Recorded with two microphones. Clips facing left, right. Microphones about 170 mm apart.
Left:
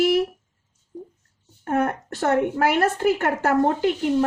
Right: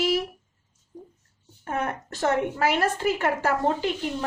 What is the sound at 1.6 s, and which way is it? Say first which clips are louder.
A woman's voice: left 6 dB; 55° left (ahead or behind).